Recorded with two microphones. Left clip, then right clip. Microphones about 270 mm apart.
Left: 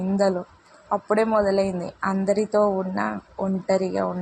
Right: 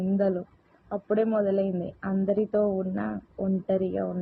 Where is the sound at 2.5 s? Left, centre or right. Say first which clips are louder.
Left 5 dB; centre.